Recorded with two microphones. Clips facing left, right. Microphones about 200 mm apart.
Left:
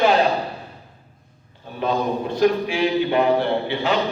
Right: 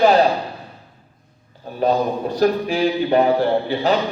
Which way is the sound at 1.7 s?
40° right (ahead or behind).